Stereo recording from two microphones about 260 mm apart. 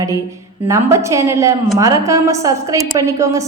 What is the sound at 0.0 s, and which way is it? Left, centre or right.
A woman's voice, centre.